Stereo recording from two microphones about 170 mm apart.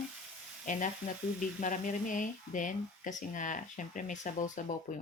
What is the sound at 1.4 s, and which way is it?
Speech, 50° left (ahead or behind).